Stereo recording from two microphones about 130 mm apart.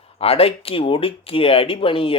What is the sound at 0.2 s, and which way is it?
A man's voice, 50° left (ahead or behind).